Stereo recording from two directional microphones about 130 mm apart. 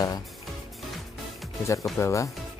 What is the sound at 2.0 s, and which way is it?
Speech, 25° left (ahead or behind).